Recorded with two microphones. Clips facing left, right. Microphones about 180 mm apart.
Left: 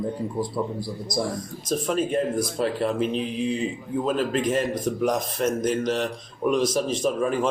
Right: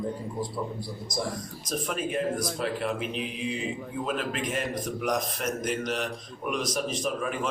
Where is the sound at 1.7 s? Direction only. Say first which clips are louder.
Left 6 dB; 30° left (ahead or behind).